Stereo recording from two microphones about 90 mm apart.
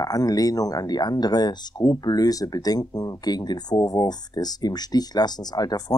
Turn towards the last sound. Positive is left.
turn(degrees=45)  # may be behind; listen again after turning